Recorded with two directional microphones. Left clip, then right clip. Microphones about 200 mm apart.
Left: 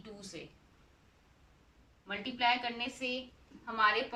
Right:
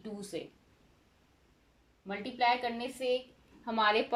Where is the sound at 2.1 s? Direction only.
25° right (ahead or behind).